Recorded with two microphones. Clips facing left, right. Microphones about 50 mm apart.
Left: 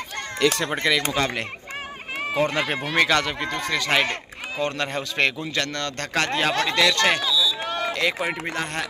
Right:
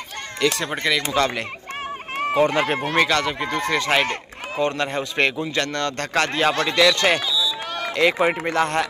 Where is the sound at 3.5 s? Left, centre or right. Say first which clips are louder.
Right 5 dB; right.